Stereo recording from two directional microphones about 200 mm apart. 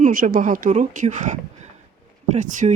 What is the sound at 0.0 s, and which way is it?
Speech, 45° right (ahead or behind).